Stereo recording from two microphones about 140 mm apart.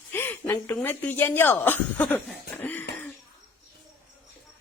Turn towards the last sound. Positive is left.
turn(degrees=15)  # may be behind; listen again after turning